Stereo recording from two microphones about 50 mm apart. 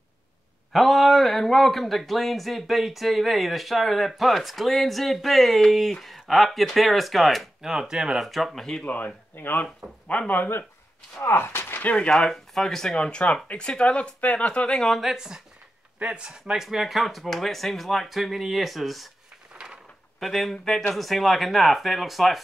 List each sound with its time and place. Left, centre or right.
0.7 s speech: centre
8.8 s speech: left
10.0 s speech: left
11.2 s speech: left
12.1 s speech: centre
14.9 s speech: centre
16.6 s speech: centre
19.5 s a sound: centre
20.2 s speech: centre